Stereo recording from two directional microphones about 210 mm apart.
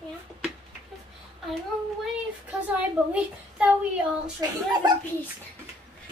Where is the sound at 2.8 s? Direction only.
5° right (ahead or behind).